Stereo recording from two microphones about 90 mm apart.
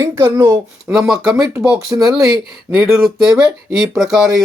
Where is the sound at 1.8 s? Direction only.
35° right (ahead or behind).